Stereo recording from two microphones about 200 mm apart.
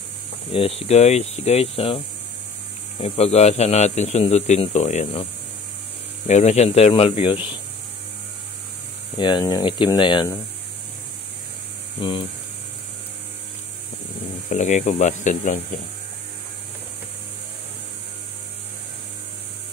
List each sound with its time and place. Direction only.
0.5 s speech: 30° left (ahead or behind)
3.0 s speech: 30° left (ahead or behind)
9.1 s speech: 20° left (ahead or behind)
12.0 s speech: 25° left (ahead or behind)
14.5 s speech: 35° left (ahead or behind)